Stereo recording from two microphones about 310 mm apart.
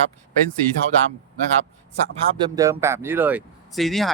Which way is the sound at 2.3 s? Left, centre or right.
Centre.